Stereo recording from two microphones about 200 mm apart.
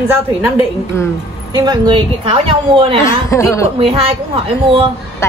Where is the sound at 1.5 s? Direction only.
20° right (ahead or behind).